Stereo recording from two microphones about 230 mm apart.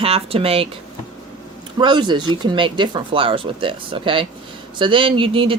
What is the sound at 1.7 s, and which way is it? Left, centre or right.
Speech, centre.